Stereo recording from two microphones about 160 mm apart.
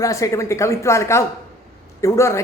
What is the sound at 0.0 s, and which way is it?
A woman's voice, 20° left (ahead or behind).